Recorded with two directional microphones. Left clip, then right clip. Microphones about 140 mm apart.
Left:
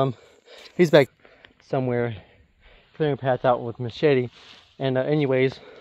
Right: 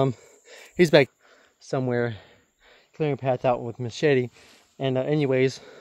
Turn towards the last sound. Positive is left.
turn(degrees=-30)  # may be behind; listen again after turning